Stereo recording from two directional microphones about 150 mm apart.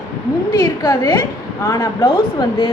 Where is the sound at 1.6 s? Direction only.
20° left (ahead or behind).